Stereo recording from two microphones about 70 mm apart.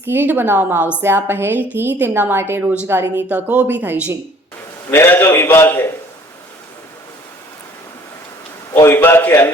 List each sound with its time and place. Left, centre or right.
0.0 s a woman's voice: right
3.3 s a woman's voice: right
4.9 s a man's voice: left
8.7 s a man's voice: left